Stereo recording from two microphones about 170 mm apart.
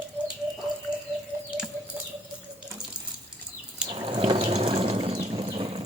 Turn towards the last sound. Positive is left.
turn(degrees=-30)  # may be behind; listen again after turning